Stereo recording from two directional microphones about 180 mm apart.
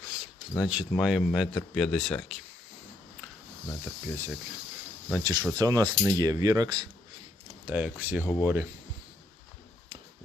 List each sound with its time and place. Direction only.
0.5 s speech: 5° right (ahead or behind)
3.7 s speech: 10° right (ahead or behind)
5.1 s speech: 20° right (ahead or behind)
7.7 s speech: 10° right (ahead or behind)